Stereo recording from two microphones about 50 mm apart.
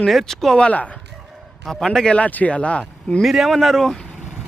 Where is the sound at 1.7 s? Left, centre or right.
Centre.